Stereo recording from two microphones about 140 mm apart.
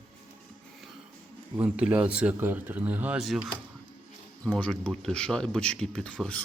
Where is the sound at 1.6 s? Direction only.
10° right (ahead or behind).